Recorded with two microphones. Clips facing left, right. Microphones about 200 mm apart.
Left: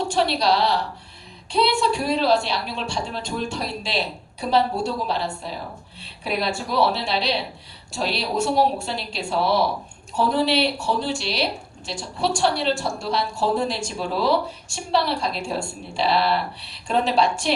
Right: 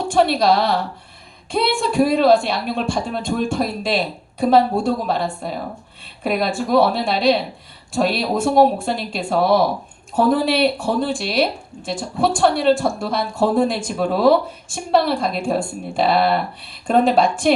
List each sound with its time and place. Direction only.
0.1 s a woman's voice: 50° right (ahead or behind)